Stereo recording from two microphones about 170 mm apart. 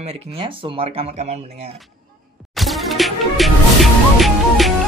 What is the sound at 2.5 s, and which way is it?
Music, centre (ahead or behind).